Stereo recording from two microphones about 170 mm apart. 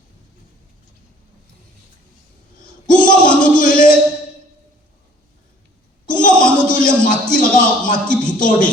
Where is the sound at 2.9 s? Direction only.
50° left (ahead or behind).